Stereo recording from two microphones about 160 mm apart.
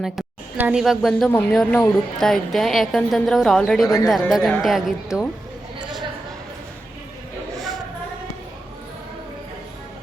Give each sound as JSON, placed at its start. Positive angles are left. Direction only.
{"t": 0.0, "sound": "a woman's voice", "side_deg": -5}
{"t": 3.8, "sound": "speech", "side_deg": 20}
{"t": 4.3, "sound": "a woman's voice", "side_deg": 0}